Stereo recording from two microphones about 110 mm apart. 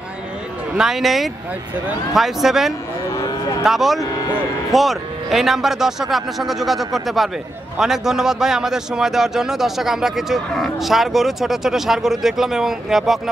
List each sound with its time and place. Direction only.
0.7 s speech: 5° right (ahead or behind)
3.2 s moo: 35° left (ahead or behind)
3.6 s speech: centre (ahead or behind)